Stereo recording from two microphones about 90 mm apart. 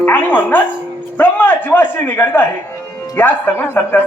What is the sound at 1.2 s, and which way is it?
A man's voice, 20° left (ahead or behind).